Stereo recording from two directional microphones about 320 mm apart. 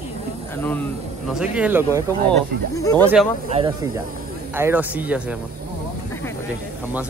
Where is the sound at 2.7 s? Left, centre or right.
Centre.